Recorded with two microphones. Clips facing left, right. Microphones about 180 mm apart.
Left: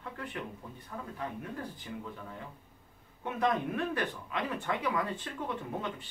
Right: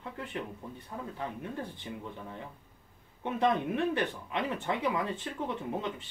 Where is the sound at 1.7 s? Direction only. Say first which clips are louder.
Right 1 dB; 25° right (ahead or behind).